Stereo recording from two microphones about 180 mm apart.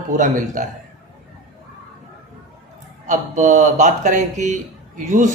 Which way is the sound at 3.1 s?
40° right (ahead or behind).